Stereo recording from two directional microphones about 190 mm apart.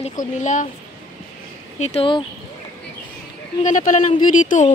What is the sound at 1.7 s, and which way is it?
Speech, 35° left (ahead or behind).